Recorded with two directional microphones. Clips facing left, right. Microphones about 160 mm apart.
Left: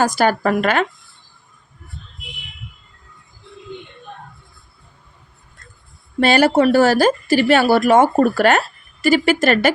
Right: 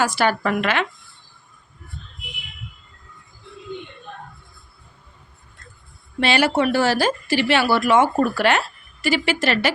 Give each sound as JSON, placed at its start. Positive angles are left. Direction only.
{"t": 0.0, "sound": "speech", "side_deg": 45}
{"t": 6.1, "sound": "speech", "side_deg": 45}